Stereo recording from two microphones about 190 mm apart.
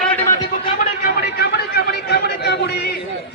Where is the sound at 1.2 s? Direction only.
55° left (ahead or behind).